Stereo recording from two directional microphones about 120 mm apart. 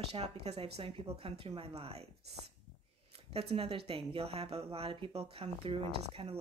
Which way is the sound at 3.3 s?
50° right (ahead or behind).